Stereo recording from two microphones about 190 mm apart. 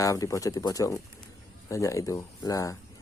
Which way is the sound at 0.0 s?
15° left (ahead or behind).